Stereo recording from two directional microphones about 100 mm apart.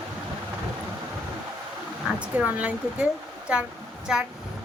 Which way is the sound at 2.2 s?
15° right (ahead or behind).